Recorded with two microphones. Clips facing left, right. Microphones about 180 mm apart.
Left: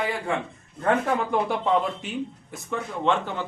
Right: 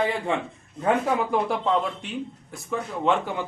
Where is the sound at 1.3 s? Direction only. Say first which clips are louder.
Even; centre (ahead or behind).